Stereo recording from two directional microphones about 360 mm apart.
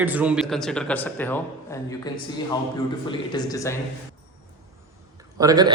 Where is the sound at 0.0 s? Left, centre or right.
Centre.